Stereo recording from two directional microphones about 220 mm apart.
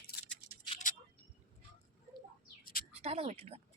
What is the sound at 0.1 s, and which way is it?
Toothbrush, 40° left (ahead or behind).